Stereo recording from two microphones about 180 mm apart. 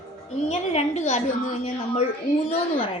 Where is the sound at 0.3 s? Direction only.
40° left (ahead or behind).